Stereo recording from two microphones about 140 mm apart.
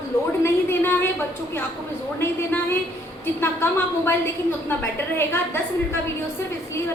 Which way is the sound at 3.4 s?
15° left (ahead or behind).